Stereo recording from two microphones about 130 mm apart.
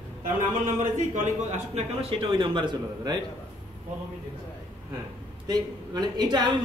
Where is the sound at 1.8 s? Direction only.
45° right (ahead or behind).